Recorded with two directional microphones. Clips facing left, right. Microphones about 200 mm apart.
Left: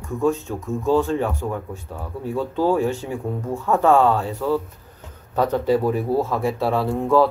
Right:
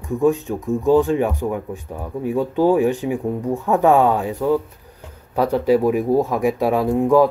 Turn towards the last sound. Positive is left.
turn(degrees=-15)  # may be behind; listen again after turning